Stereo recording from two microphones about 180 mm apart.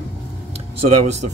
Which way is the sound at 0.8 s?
40° right (ahead or behind).